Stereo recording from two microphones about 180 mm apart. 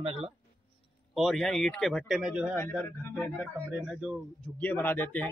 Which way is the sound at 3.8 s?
5° right (ahead or behind).